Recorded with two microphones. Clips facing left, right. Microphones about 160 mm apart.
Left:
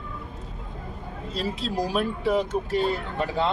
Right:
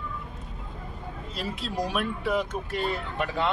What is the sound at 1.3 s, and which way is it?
Speech, 30° left (ahead or behind).